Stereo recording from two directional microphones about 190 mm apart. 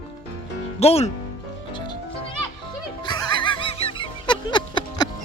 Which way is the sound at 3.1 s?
25° left (ahead or behind).